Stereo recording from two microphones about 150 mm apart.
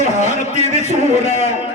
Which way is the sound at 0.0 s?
50° left (ahead or behind).